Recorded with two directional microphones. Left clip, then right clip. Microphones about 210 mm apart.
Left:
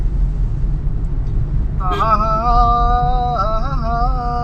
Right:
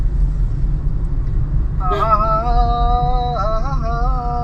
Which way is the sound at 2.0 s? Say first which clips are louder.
Left 1 dB; 25° left (ahead or behind).